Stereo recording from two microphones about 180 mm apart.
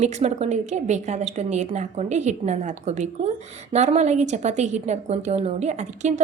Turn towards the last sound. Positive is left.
turn(degrees=-40)  # may be behind; listen again after turning